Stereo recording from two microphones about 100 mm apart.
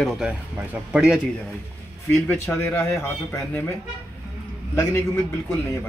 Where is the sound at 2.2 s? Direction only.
20° left (ahead or behind).